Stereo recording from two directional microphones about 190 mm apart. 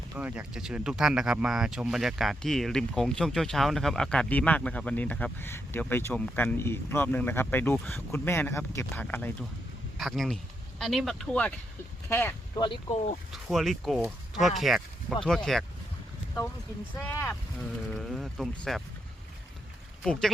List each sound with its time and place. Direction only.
0.2 s speech: 5° right (ahead or behind); by 12.3 s 10° left (ahead or behind)
12.5 s speech: 25° left (ahead or behind)
13.3 s speech: centre (ahead or behind)
17.0 s speech: 10° left (ahead or behind)
17.9 s speech: centre (ahead or behind)